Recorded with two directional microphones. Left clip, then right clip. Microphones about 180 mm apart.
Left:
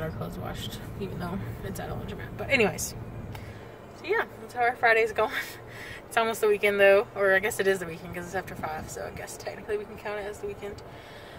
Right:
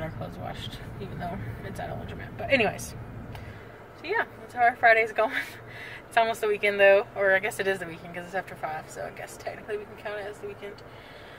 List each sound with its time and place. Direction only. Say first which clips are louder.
0.0 s speech: left 1 dB; 10° left (ahead or behind)
2.4 s speech: even; 10° left (ahead or behind)
4.0 s speech: even; 10° left (ahead or behind)